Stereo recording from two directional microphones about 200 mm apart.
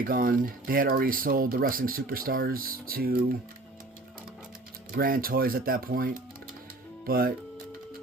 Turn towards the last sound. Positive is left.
turn(degrees=-45)  # may be behind; listen again after turning